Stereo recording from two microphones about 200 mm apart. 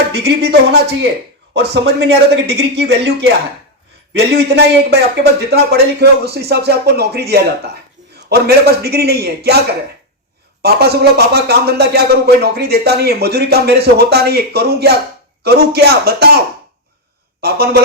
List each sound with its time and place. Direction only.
0.3 s a man's voice: 60° right (ahead or behind)
10.6 s a man's voice: 55° right (ahead or behind)
17.4 s a man's voice: 50° right (ahead or behind)